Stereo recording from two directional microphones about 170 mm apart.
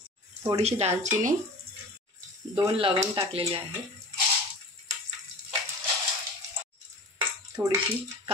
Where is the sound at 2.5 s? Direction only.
25° right (ahead or behind).